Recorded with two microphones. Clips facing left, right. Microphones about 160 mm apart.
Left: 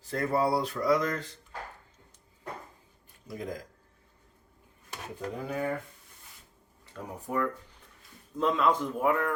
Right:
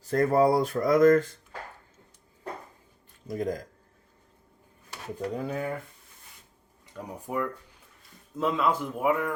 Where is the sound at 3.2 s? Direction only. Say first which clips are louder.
Right 7 dB; 45° right (ahead or behind).